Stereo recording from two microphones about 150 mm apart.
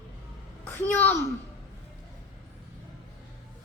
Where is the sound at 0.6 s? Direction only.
15° left (ahead or behind).